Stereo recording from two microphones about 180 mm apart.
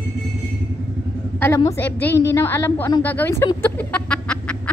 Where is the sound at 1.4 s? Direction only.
15° left (ahead or behind).